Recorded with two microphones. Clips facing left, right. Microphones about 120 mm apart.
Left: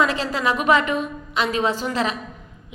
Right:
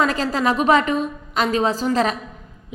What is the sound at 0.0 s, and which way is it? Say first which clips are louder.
A woman's voice: right 2 dB; 40° right (ahead or behind).